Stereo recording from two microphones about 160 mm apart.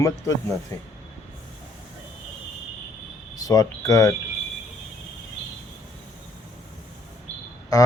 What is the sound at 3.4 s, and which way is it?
Speech, 20° left (ahead or behind).